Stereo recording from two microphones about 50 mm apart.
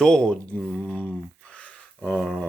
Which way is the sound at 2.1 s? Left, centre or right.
Centre.